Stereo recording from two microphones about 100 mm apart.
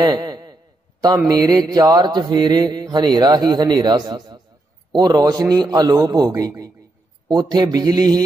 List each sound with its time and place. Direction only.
0.0 s a sound: 45° right (ahead or behind)
1.2 s mantra: 40° right (ahead or behind)
4.9 s a man's voice: 40° right (ahead or behind)
7.2 s mantra: 45° right (ahead or behind)